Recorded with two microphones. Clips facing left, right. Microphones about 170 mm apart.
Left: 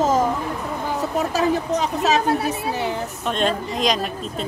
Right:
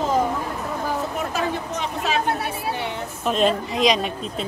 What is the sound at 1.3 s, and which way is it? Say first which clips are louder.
Speech: left 5 dB; 35° left (ahead or behind).